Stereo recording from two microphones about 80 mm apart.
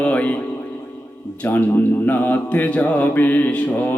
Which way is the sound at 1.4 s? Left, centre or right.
Left.